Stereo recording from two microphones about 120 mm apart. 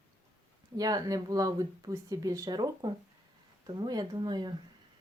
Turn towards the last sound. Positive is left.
turn(degrees=-35)  # may be behind; listen again after turning